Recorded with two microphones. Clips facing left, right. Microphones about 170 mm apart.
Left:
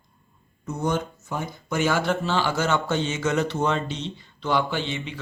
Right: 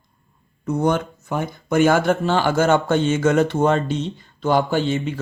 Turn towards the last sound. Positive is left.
turn(degrees=-45)  # may be behind; listen again after turning